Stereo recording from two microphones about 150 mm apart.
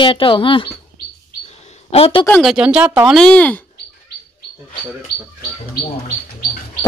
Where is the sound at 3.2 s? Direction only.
10° left (ahead or behind).